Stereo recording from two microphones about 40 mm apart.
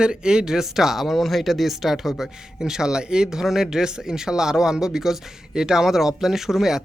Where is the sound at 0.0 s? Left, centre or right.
Centre.